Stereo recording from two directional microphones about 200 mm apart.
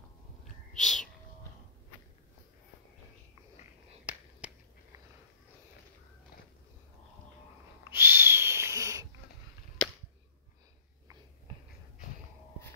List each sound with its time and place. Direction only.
0.7 s a sound: centre (ahead or behind)
4.0 s finger snapping: 5° right (ahead or behind)
7.8 s owl: 10° right (ahead or behind)